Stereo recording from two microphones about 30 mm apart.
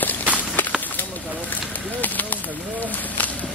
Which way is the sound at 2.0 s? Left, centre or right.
Left.